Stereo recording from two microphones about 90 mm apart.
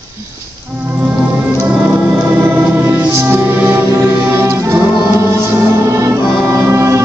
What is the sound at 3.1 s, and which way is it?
Music, 25° right (ahead or behind).